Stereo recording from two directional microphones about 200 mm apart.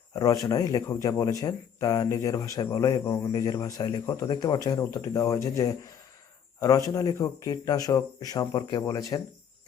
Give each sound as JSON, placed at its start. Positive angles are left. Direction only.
{"t": 0.1, "sound": "a man's voice", "side_deg": 15}